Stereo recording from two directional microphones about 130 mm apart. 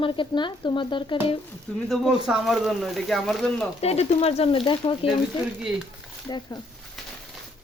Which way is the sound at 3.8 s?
55° left (ahead or behind).